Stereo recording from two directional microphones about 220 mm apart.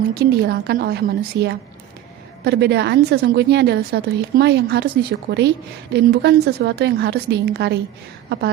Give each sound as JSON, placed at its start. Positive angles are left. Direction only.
{"t": 0.1, "sound": "a woman's voice", "side_deg": -50}